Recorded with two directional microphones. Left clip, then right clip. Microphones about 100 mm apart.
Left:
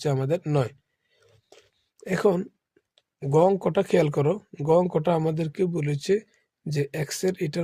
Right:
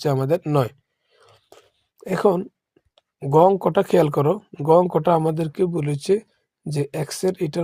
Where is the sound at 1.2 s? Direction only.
45° right (ahead or behind); by 2.4 s 25° right (ahead or behind).